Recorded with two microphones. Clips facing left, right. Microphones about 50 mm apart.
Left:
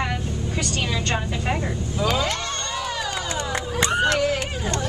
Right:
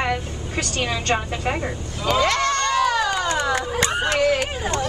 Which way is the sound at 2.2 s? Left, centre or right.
Right.